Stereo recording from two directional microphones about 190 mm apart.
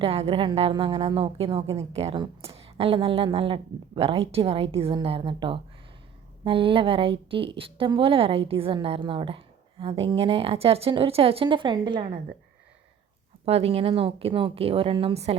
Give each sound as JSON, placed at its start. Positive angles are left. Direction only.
{"t": 0.0, "sound": "a woman's voice", "side_deg": -30}
{"t": 13.4, "sound": "a woman's voice", "side_deg": -30}